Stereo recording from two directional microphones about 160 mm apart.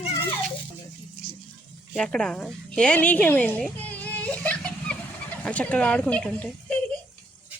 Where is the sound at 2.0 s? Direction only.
5° left (ahead or behind).